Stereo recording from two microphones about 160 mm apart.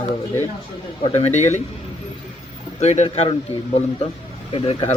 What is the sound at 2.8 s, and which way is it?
A man's voice, 45° left (ahead or behind).